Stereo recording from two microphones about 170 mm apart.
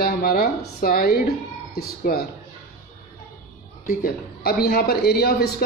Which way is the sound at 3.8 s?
60° left (ahead or behind).